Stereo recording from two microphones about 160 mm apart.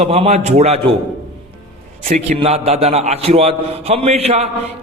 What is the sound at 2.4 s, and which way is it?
A man's voice, 35° right (ahead or behind).